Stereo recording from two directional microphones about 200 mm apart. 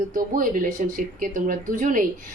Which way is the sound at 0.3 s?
40° right (ahead or behind).